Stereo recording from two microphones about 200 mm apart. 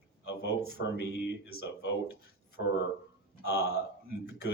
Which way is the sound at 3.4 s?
55° left (ahead or behind).